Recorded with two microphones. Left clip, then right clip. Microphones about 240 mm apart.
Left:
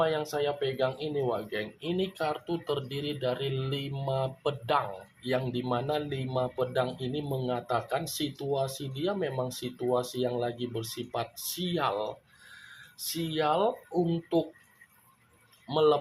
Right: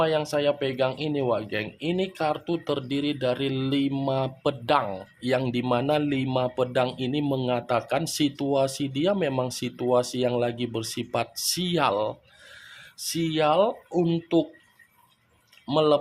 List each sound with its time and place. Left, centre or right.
0.0 s speech: right
15.6 s speech: right